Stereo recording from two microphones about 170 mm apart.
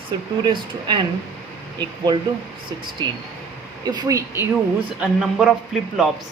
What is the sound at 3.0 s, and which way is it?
Speech, 25° right (ahead or behind).